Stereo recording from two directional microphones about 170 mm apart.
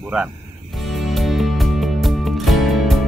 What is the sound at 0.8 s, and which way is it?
Music, centre (ahead or behind).